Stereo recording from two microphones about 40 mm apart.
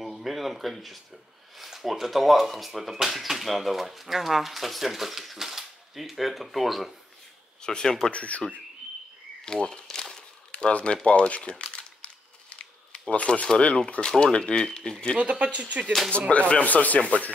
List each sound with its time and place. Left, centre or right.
0.0 s speech: centre
7.6 s speech: centre
8.1 s speech: left
9.4 s speech: centre
9.8 s crumpling: centre
10.5 s speech: left
12.5 s camera: left
13.6 s speech: left
15.1 s speech: right
16.3 s speech: left